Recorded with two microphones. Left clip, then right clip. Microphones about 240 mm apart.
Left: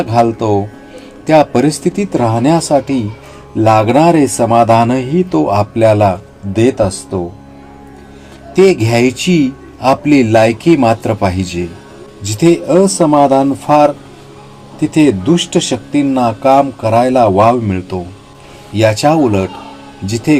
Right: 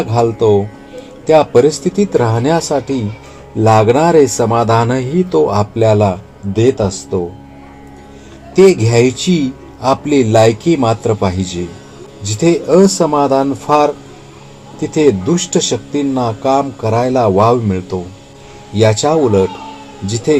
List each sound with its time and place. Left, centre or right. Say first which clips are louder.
0.1 s speech: right 1 dB; left
8.7 s speech: even; left